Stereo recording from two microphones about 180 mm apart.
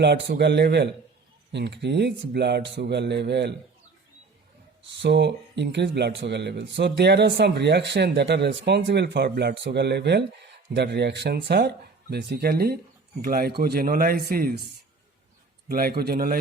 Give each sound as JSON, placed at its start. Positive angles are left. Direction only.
{"t": 0.0, "sound": "speech", "side_deg": -65}
{"t": 4.9, "sound": "speech", "side_deg": -75}
{"t": 15.7, "sound": "speech", "side_deg": -60}